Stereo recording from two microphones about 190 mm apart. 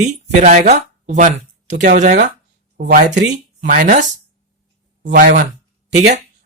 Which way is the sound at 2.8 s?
60° right (ahead or behind).